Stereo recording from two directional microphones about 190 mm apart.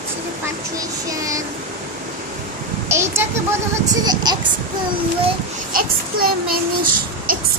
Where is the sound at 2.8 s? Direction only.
15° right (ahead or behind).